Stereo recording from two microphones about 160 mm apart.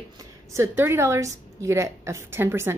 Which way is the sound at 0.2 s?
20° right (ahead or behind).